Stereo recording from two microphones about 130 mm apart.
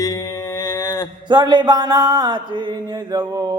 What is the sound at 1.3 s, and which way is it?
Mantra, 35° right (ahead or behind).